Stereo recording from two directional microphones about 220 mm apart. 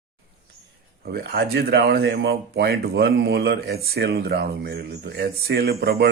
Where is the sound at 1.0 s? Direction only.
45° right (ahead or behind).